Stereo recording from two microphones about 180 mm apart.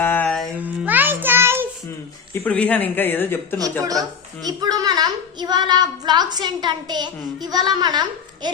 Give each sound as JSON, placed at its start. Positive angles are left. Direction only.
{"t": 0.0, "sound": "a sound", "side_deg": 10}
{"t": 0.6, "sound": "music", "side_deg": -10}
{"t": 2.3, "sound": "speech", "side_deg": 10}
{"t": 4.4, "sound": "a woman's voice", "side_deg": -20}